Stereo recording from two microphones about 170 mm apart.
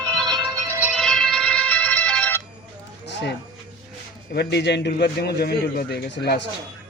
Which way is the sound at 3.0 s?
75° left (ahead or behind).